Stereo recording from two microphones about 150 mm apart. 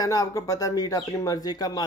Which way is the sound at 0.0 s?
25° left (ahead or behind).